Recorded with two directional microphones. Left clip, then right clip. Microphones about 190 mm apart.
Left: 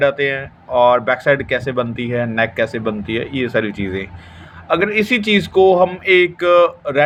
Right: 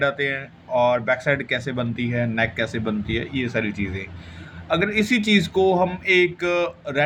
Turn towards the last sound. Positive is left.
turn(degrees=20)  # may be behind; listen again after turning